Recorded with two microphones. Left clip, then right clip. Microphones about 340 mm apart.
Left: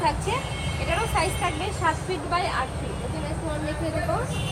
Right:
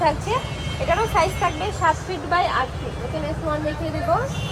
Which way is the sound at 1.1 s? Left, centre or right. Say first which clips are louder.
Right 5 dB; right.